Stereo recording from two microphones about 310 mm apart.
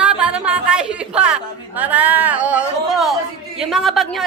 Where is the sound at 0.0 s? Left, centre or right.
Centre.